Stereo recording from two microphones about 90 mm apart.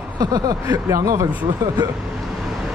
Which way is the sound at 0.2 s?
45° right (ahead or behind).